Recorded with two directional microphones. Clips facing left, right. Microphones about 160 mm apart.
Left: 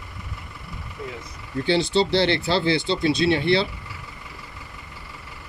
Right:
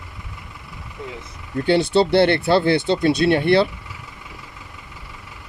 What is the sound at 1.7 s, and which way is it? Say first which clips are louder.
Speech: right 4 dB; 60° right (ahead or behind).